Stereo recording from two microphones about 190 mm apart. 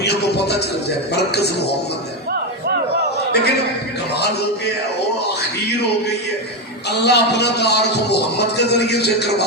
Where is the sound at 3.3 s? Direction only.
60° left (ahead or behind).